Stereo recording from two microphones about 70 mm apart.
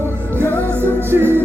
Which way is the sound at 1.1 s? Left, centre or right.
Right.